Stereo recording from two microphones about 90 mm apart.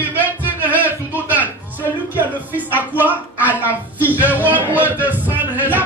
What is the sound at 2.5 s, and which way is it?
Speech, 20° right (ahead or behind).